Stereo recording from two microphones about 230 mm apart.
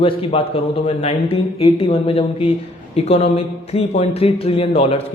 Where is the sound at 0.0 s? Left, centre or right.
Left.